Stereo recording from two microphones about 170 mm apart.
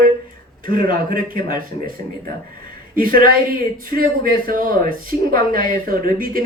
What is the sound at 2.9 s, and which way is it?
A woman's voice, 60° right (ahead or behind).